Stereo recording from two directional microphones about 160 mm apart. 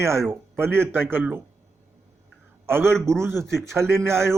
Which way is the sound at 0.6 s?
15° right (ahead or behind).